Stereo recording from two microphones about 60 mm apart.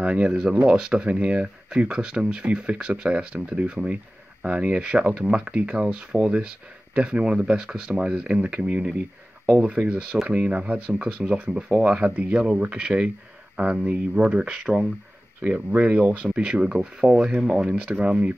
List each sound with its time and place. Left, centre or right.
0.0 s speech: centre